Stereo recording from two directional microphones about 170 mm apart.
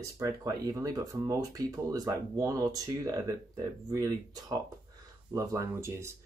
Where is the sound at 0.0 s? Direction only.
20° right (ahead or behind).